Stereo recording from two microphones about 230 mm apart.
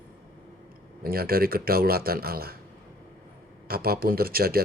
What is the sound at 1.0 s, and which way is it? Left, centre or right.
Speech, right.